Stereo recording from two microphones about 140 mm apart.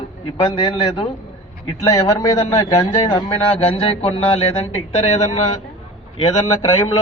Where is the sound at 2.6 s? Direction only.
30° left (ahead or behind); by 5.4 s 55° left (ahead or behind).